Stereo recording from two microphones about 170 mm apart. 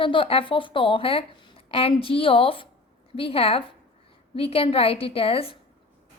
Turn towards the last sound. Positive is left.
turn(degrees=35)  # may be behind; listen again after turning